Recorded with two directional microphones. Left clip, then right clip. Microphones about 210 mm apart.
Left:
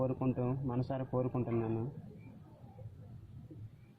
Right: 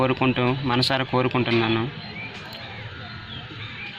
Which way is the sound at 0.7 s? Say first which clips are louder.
Right 17 dB; 25° right (ahead or behind).